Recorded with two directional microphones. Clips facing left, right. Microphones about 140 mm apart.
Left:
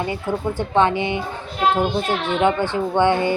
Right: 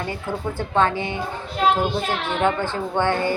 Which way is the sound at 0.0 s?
15° left (ahead or behind).